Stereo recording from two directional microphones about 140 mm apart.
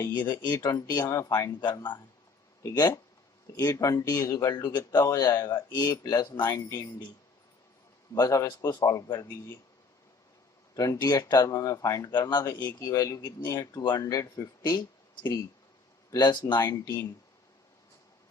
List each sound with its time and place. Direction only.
0.0 s speech: 30° left (ahead or behind)
8.1 s speech: 25° left (ahead or behind)
10.8 s speech: 25° left (ahead or behind)